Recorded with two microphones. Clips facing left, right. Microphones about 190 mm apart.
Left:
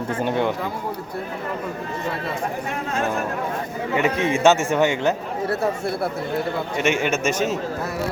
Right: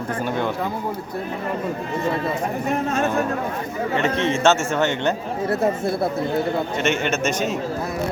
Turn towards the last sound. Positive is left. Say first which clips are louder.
# left 1 dB
turn(degrees=5)  # may be behind; listen again after turning